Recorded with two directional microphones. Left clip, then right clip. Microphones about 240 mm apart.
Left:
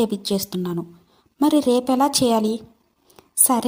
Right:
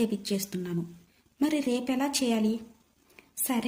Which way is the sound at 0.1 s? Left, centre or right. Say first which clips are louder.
Left 8 dB; left.